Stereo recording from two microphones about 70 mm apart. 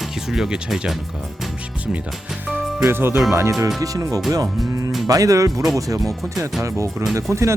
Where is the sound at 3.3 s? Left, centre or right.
Right.